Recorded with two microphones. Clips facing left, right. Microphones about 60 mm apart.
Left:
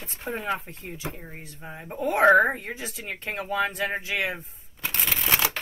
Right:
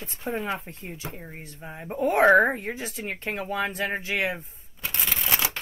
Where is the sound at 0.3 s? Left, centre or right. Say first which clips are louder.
Right 2 dB; centre.